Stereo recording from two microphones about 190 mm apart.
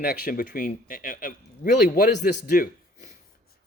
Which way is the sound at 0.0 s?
55° left (ahead or behind).